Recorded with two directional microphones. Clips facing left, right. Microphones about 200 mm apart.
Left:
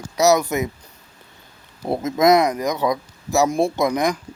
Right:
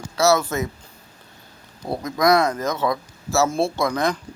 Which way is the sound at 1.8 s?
25° left (ahead or behind).